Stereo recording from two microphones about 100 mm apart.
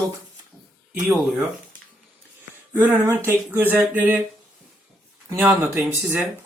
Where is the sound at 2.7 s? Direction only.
20° right (ahead or behind).